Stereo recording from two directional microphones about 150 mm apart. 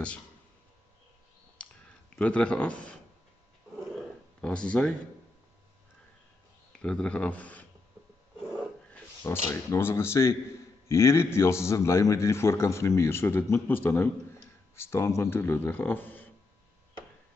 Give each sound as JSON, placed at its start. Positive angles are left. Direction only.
{"t": 1.6, "sound": "a sound", "side_deg": 10}
{"t": 2.1, "sound": "a man's voice", "side_deg": 10}
{"t": 4.4, "sound": "a man's voice", "side_deg": 5}
{"t": 6.8, "sound": "speech", "side_deg": 5}
{"t": 8.9, "sound": "a sound", "side_deg": 15}
{"t": 9.5, "sound": "a man's voice", "side_deg": 15}